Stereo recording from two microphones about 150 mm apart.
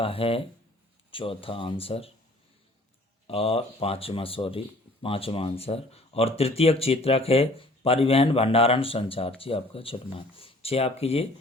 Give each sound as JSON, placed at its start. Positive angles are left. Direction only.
{"t": 0.0, "sound": "speech", "side_deg": 40}
{"t": 3.2, "sound": "speech", "side_deg": 40}